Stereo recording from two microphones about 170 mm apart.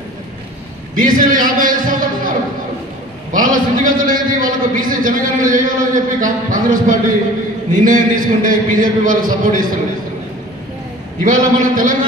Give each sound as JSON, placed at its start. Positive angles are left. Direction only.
{"t": 0.9, "sound": "a man's voice", "side_deg": -55}
{"t": 11.2, "sound": "a man's voice", "side_deg": -50}